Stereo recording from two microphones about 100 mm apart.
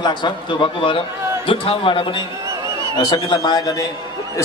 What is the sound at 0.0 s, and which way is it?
A man's voice, 50° left (ahead or behind).